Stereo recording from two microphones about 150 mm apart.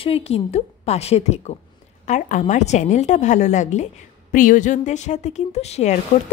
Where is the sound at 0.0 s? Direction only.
40° left (ahead or behind).